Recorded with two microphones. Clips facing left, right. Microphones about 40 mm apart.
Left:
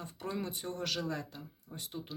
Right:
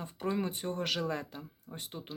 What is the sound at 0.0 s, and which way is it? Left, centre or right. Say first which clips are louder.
Speech: right 5 dB; right.